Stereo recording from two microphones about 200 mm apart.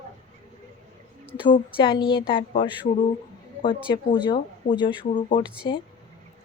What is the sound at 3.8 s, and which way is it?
Speech, 20° left (ahead or behind).